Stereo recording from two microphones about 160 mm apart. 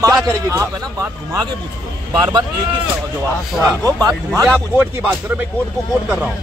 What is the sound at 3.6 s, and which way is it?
Speech, 20° right (ahead or behind).